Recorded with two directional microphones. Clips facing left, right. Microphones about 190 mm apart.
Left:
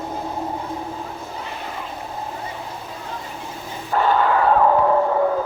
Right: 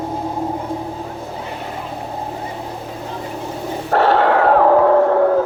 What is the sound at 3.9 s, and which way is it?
Dog, 75° right (ahead or behind).